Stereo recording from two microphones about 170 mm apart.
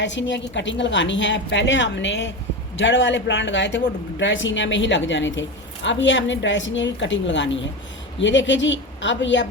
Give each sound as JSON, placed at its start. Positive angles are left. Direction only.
{"t": 0.0, "sound": "a woman's voice", "side_deg": 90}